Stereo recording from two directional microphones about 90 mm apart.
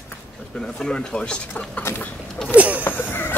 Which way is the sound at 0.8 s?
10° left (ahead or behind).